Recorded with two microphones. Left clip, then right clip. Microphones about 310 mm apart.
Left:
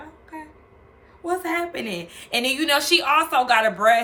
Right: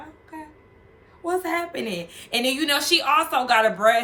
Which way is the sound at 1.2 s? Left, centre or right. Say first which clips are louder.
Even; centre.